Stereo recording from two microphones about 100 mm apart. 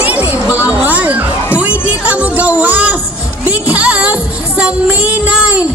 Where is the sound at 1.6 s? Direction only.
15° right (ahead or behind).